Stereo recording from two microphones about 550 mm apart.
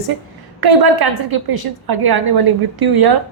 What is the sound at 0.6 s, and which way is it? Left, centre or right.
A woman's voice, right.